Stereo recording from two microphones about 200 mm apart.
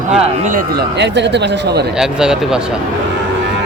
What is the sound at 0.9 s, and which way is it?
Speech, 60° right (ahead or behind).